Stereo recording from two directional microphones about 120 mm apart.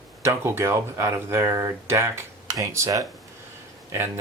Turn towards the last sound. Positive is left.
turn(degrees=-20)  # may be behind; listen again after turning